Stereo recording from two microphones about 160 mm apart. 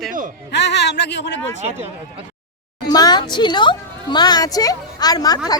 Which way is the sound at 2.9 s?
25° left (ahead or behind).